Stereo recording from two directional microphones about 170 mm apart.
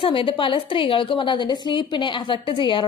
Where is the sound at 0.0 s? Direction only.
30° left (ahead or behind).